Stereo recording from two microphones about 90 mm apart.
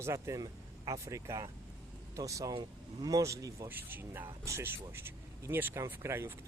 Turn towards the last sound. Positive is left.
turn(degrees=-30)  # may be behind; listen again after turning